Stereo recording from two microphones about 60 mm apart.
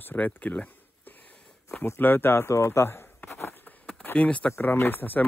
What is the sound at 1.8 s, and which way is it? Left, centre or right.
Speech, left.